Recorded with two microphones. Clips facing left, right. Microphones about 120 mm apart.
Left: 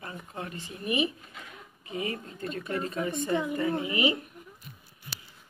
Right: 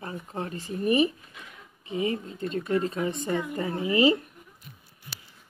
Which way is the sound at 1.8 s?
25° right (ahead or behind).